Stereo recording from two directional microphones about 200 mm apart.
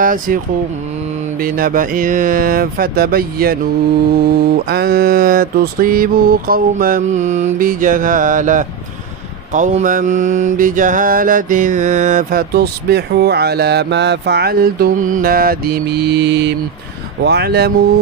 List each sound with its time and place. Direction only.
0.0 s mantra: 45° right (ahead or behind)
1.4 s mantra: 45° right (ahead or behind)
4.6 s mantra: 50° right (ahead or behind)